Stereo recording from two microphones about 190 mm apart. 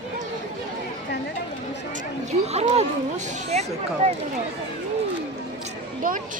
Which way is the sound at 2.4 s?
35° right (ahead or behind).